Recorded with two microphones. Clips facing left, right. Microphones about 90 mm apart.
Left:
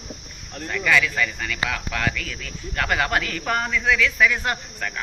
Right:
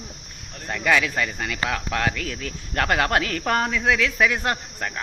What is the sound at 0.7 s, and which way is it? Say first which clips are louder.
A man's voice: even; 50° right (ahead or behind).